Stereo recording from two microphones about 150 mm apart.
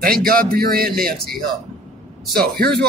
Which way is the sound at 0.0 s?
80° right.